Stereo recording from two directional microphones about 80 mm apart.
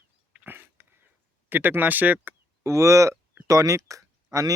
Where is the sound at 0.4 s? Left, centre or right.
Right.